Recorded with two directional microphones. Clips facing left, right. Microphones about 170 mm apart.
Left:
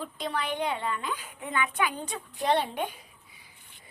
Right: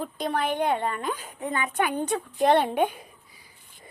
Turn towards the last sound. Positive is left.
turn(degrees=-55)  # may be behind; listen again after turning